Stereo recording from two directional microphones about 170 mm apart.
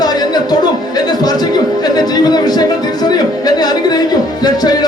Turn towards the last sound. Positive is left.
turn(degrees=25)  # may be behind; listen again after turning